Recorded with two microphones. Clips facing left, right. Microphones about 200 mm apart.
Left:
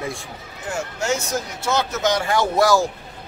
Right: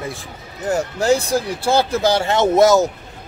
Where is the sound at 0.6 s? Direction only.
35° right (ahead or behind).